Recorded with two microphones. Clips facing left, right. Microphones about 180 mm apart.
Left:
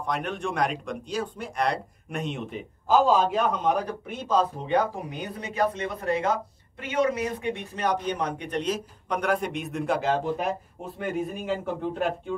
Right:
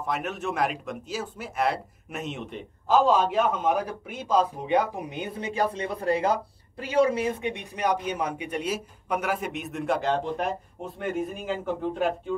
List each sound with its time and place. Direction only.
0.0 s a man's voice: 5° right (ahead or behind)